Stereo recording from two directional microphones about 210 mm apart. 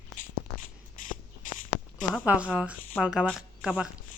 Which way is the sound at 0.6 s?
40° left (ahead or behind).